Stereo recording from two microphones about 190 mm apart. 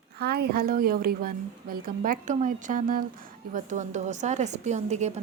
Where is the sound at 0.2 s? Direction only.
55° right (ahead or behind).